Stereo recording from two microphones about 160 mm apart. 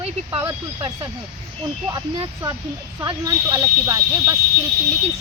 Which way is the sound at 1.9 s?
25° right (ahead or behind).